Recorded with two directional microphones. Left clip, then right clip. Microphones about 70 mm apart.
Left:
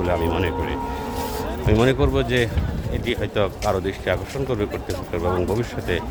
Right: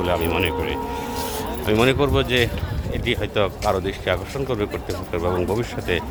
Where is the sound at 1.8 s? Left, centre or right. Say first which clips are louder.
Right 2 dB; left.